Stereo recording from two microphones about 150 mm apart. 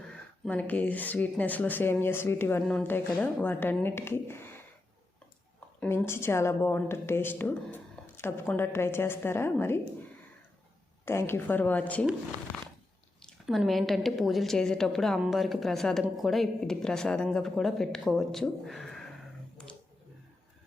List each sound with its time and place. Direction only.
0.1 s a woman's voice: 10° left (ahead or behind)
5.8 s a woman's voice: 15° left (ahead or behind)
11.0 s a woman's voice: 15° left (ahead or behind)
13.2 s a woman's voice: centre (ahead or behind)